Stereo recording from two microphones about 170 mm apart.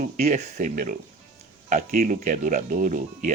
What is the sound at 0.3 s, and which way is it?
Speech, 45° right (ahead or behind).